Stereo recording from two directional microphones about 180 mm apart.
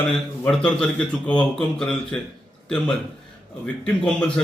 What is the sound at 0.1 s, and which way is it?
A man's voice, 5° left (ahead or behind).